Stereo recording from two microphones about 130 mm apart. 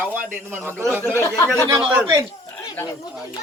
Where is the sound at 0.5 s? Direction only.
20° right (ahead or behind).